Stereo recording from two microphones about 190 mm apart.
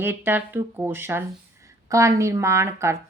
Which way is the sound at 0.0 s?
10° right (ahead or behind).